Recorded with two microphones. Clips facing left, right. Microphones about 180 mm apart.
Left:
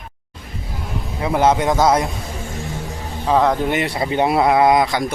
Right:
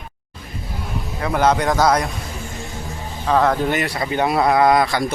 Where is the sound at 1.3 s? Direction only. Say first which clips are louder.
Left 1 dB; 25° left (ahead or behind).